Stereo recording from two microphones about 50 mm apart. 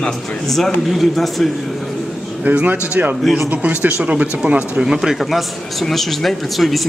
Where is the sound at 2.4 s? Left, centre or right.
Right.